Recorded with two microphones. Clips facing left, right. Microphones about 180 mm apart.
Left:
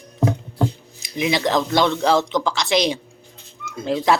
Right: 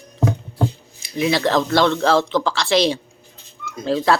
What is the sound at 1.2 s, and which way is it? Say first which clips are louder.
Speech: right 2 dB; 15° left (ahead or behind).